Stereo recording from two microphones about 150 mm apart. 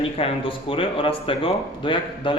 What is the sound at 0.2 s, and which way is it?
Speech, 40° left (ahead or behind).